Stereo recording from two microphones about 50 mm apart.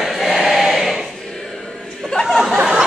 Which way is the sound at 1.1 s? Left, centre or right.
Centre.